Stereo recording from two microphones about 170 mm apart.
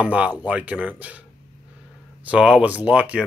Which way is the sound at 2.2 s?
5° right (ahead or behind).